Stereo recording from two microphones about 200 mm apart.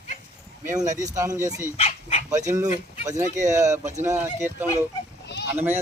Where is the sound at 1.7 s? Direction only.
30° left (ahead or behind).